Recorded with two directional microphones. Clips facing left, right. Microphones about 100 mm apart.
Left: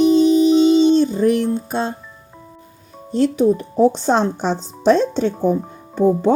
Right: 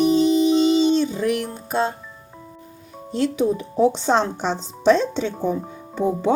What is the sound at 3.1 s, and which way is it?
Speech, 40° left (ahead or behind).